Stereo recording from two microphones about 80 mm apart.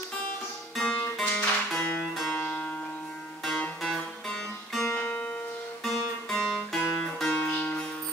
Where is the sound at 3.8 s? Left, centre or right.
Centre.